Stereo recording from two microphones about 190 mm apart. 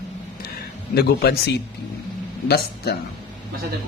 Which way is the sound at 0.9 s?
55° left (ahead or behind).